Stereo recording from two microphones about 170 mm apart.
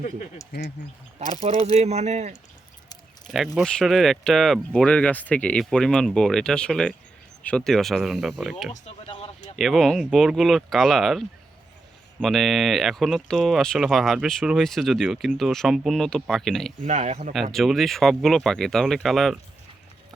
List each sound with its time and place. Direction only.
1.6 s speech: 40° right (ahead or behind)
3.2 s speech: centre (ahead or behind)
9.0 s a sound: 35° left (ahead or behind)
9.6 s speech: centre (ahead or behind)
16.8 s speech: 45° right (ahead or behind)
17.5 s speech: centre (ahead or behind)